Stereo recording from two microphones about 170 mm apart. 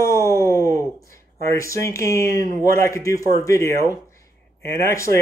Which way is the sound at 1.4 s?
15° left (ahead or behind).